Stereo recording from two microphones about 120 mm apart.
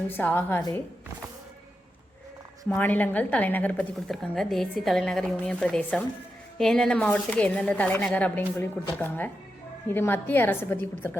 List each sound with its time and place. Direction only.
0.1 s speech: 15° left (ahead or behind)
2.6 s speech: 15° left (ahead or behind)
4.1 s a woman's voice: centre (ahead or behind); by 11.2 s 20° left (ahead or behind)